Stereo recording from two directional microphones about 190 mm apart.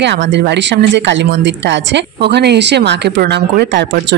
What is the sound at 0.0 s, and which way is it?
Speech, 70° right (ahead or behind).